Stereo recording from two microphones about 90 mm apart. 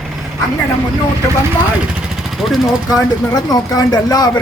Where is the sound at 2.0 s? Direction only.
5° right (ahead or behind).